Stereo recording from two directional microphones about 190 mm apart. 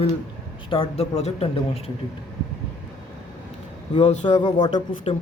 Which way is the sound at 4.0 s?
35° left (ahead or behind).